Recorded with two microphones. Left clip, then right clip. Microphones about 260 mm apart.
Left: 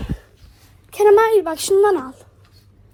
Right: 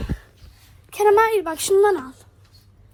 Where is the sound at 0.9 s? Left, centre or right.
Centre.